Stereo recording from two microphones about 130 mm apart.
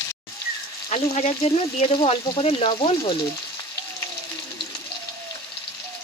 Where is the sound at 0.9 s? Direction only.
60° left (ahead or behind).